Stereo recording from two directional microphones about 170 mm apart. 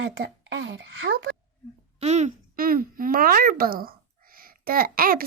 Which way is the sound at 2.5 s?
60° right (ahead or behind).